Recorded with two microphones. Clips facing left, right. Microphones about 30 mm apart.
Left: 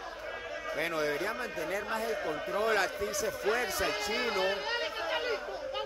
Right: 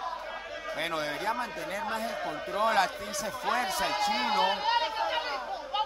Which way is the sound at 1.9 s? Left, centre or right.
Centre.